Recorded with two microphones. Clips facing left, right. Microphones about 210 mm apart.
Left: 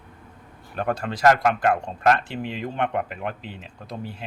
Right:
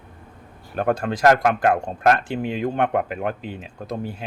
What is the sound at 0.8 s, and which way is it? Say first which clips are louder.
Speech: right 3 dB; 45° right (ahead or behind).